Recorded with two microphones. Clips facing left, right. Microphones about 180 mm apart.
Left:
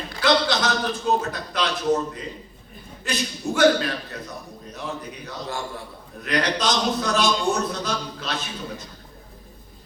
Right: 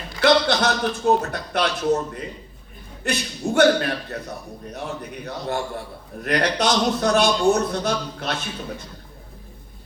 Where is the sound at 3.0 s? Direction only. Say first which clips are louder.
Right 2 dB; 60° right (ahead or behind).